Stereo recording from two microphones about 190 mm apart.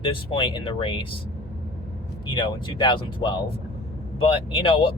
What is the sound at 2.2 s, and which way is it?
Speech, 25° left (ahead or behind).